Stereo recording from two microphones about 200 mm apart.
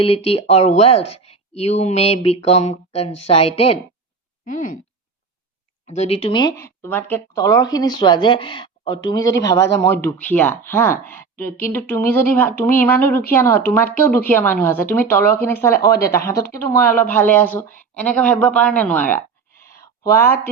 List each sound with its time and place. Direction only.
0.0 s speech: 30° left (ahead or behind)
4.4 s speech: 40° left (ahead or behind)
5.9 s a woman's voice: 30° left (ahead or behind); by 19.2 s 10° left (ahead or behind)
19.6 s a sound: 15° left (ahead or behind)